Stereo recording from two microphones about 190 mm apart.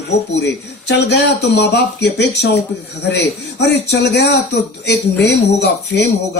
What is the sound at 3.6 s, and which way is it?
Speech, 60° left (ahead or behind).